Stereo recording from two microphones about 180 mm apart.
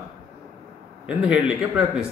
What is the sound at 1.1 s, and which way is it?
Speech, 5° right (ahead or behind).